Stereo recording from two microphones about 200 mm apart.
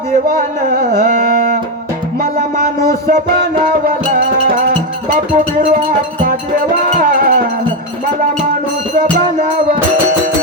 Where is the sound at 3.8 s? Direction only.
40° right (ahead or behind).